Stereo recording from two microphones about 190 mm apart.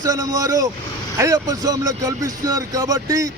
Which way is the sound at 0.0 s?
20° right (ahead or behind).